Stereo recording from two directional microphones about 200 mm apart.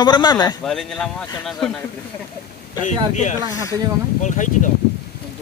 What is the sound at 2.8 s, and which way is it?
Speech, 35° left (ahead or behind).